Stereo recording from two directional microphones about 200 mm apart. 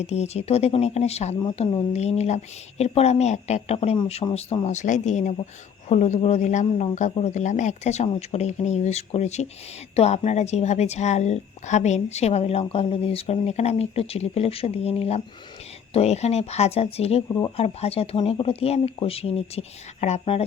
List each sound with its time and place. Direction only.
0.0 s speech: 35° left (ahead or behind)